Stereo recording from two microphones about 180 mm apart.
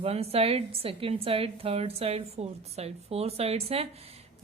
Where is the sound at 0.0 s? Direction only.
35° right (ahead or behind).